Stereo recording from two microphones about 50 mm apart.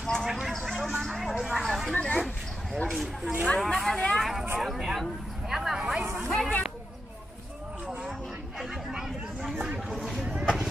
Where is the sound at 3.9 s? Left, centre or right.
Centre.